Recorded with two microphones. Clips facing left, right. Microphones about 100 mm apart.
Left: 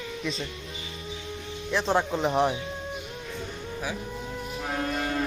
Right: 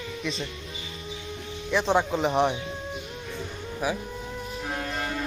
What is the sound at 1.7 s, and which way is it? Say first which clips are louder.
Speech: right 2 dB; centre (ahead or behind).